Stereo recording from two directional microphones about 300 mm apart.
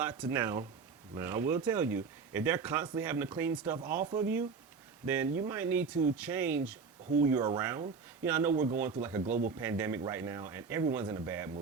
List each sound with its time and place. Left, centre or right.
0.0 s speech: centre
9.2 s speech: right
9.6 s speech: centre